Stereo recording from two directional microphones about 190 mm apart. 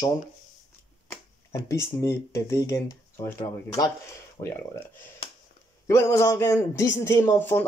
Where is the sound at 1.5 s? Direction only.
15° left (ahead or behind).